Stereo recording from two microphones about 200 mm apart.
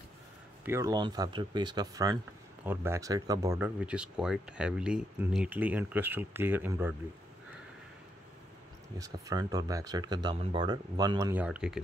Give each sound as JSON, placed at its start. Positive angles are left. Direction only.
{"t": 0.7, "sound": "speech", "side_deg": -15}
{"t": 8.9, "sound": "speech", "side_deg": -20}